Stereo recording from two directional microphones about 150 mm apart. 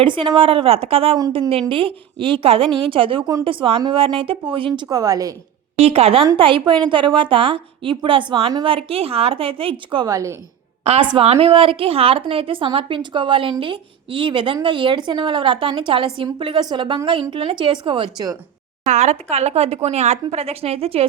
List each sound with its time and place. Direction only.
0.0 s a woman's voice: 35° right (ahead or behind)
4.9 s a woman's voice: 25° right (ahead or behind)
5.8 s a woman's voice: 40° right (ahead or behind); by 10.3 s 20° right (ahead or behind)
11.2 s a woman's voice: 40° right (ahead or behind)
18.9 s speech: 50° right (ahead or behind)